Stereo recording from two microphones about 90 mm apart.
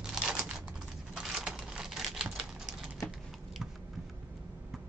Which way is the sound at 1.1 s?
5° right (ahead or behind).